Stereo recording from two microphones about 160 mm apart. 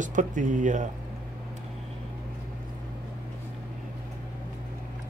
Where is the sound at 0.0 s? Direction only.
50° right (ahead or behind).